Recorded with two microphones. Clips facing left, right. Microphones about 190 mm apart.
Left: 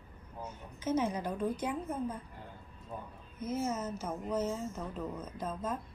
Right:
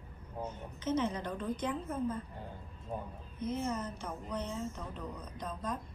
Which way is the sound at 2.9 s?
25° right (ahead or behind).